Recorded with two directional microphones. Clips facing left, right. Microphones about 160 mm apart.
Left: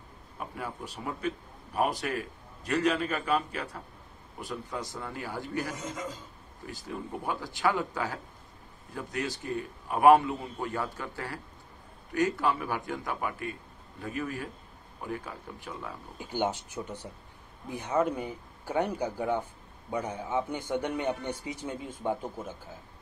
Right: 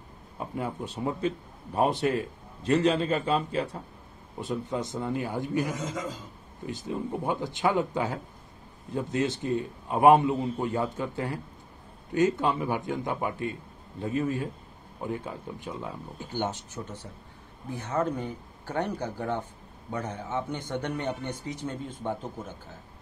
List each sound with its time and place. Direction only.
0.4 s a man's voice: 20° right (ahead or behind)
5.8 s a man's voice: 90° right
6.6 s a man's voice: 20° right (ahead or behind)
16.2 s a man's voice: 10° left (ahead or behind)